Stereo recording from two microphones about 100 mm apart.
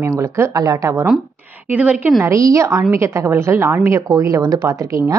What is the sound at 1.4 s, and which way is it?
Speech, 15° right (ahead or behind).